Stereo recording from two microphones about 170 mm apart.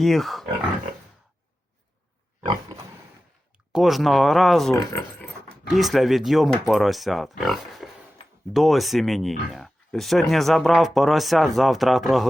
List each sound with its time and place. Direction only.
0.0 s speech: centre (ahead or behind)
2.4 s pig: 25° right (ahead or behind)
3.7 s speech: centre (ahead or behind)
4.7 s speech: 20° left (ahead or behind)
5.6 s speech: centre (ahead or behind)